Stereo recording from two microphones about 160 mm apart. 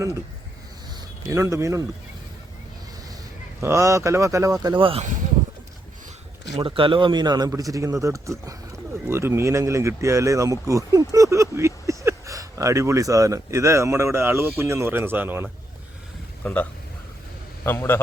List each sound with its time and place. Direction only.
1.3 s speech: 20° right (ahead or behind)
3.6 s speech: 15° right (ahead or behind); by 5.0 s 35° right (ahead or behind)
6.6 s speech: 35° right (ahead or behind); by 15.4 s 10° right (ahead or behind)
16.4 s a man's voice: 10° left (ahead or behind)